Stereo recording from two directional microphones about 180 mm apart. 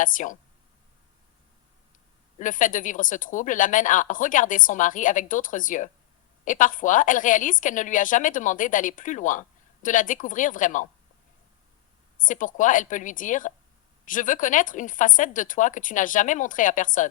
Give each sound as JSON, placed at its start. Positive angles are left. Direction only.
{"t": 0.0, "sound": "speech", "side_deg": 45}
{"t": 2.4, "sound": "speech", "side_deg": 45}
{"t": 12.2, "sound": "speech", "side_deg": 45}